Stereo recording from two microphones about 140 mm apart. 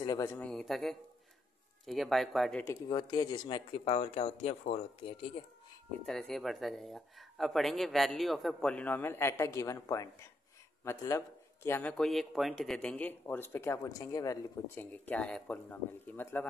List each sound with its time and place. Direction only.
0.0 s speech: 25° left (ahead or behind)
0.4 s a man's voice: 5° left (ahead or behind)
2.9 s speech: 35° left (ahead or behind)
6.0 s a man's voice: 5° left (ahead or behind)
12.0 s speech: centre (ahead or behind); by 14.4 s 25° left (ahead or behind)
14.8 s speech: 10° left (ahead or behind)